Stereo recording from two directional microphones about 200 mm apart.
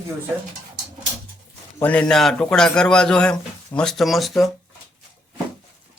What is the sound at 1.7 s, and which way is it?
A man's voice, 5° left (ahead or behind).